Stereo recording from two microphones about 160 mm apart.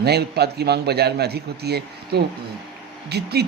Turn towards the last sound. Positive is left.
turn(degrees=-90)